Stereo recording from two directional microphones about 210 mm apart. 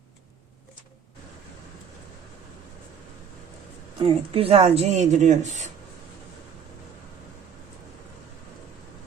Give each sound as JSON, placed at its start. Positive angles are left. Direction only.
{"t": 3.9, "sound": "a woman's voice", "side_deg": -25}